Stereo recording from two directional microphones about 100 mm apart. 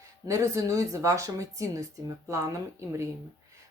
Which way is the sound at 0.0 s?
35° right (ahead or behind).